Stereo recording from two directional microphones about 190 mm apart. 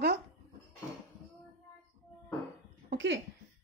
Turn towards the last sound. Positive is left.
turn(degrees=-70)  # may be behind; listen again after turning